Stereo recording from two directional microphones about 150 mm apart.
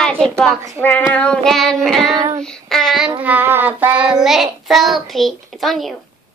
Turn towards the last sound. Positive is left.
turn(degrees=0)  # may be behind; listen again after turning